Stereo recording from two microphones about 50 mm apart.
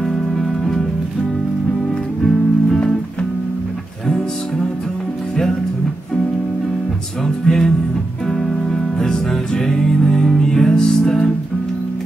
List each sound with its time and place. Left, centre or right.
2.2 s music: centre
7.4 s music: centre
8.9 s music: centre